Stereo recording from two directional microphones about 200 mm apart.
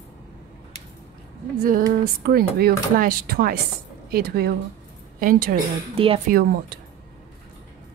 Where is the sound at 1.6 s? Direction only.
45° right (ahead or behind).